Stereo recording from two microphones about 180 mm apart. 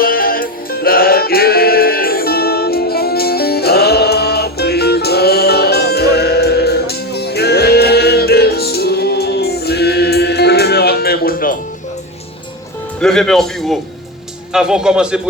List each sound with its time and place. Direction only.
0.0 s music: 55° left (ahead or behind)
13.0 s a man's voice: 5° left (ahead or behind)